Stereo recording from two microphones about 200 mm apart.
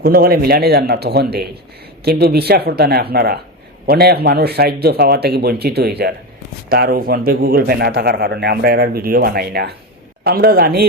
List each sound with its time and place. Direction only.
0.0 s a man's voice: 45° right (ahead or behind)